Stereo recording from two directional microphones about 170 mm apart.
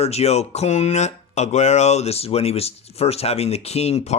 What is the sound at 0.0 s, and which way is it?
Speech, 40° left (ahead or behind).